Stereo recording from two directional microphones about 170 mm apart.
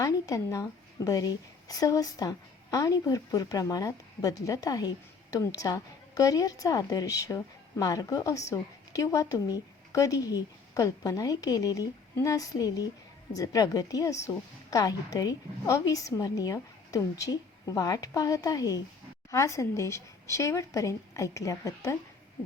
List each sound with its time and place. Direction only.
0.0 s a woman's voice: 20° left (ahead or behind)